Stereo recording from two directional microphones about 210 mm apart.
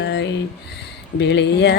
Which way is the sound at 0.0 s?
55° left (ahead or behind).